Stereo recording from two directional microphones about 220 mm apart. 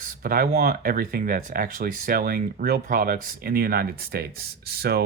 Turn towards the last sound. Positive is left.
turn(degrees=-45)  # may be behind; listen again after turning